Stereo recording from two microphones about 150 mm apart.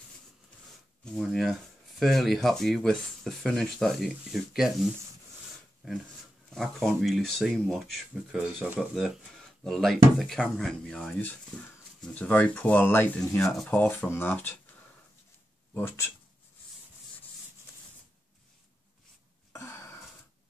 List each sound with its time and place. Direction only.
1.0 s speech: centre (ahead or behind)
15.7 s speech: 15° left (ahead or behind)